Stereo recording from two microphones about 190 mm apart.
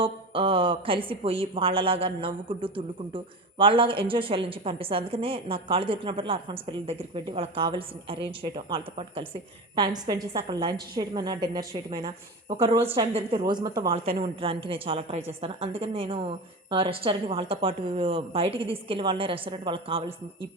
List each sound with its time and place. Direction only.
0.0 s a woman's voice: 30° right (ahead or behind)
12.5 s a woman's voice: 30° right (ahead or behind)